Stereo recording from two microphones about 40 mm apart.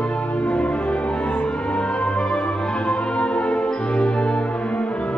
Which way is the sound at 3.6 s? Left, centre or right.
Left.